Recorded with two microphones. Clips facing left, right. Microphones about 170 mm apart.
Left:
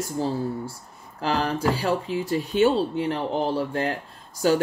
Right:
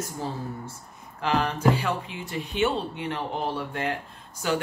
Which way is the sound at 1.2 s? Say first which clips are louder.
Even; 35° left (ahead or behind).